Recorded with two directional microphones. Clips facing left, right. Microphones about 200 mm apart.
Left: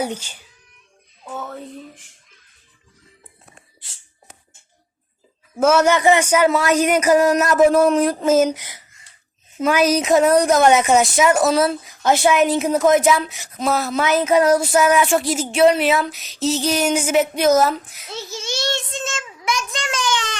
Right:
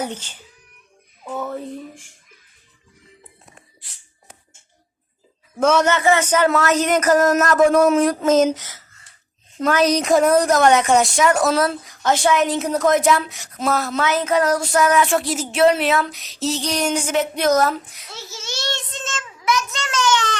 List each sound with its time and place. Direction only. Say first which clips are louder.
0.0 s speech: left 3 dB; 10° left (ahead or behind)
1.2 s music: right 3 dB; 5° right (ahead or behind)
5.5 s speech: left 2 dB; 5° left (ahead or behind)
8.5 s a sound: even; 15° left (ahead or behind)
9.6 s a woman's voice: left 1 dB; 10° left (ahead or behind)
18.1 s speech: left 5 dB; 15° left (ahead or behind)